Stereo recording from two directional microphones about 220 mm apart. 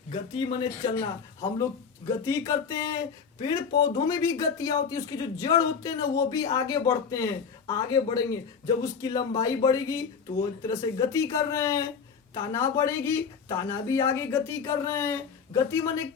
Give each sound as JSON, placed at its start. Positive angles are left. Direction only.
{"t": 0.1, "sound": "speech", "side_deg": 20}